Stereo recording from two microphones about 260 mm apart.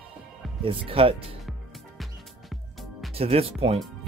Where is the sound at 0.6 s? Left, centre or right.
Right.